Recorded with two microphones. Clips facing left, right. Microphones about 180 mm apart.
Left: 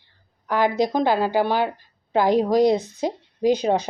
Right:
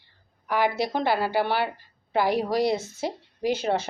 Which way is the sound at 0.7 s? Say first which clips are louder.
Left 5 dB; 15° left (ahead or behind).